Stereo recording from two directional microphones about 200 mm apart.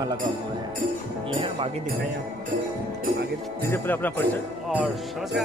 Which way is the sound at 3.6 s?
10° left (ahead or behind).